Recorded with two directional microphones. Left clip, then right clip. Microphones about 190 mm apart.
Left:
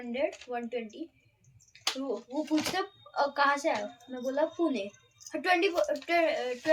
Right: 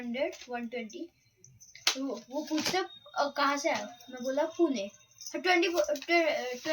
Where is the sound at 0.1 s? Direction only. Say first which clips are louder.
Left 2 dB; 30° left (ahead or behind).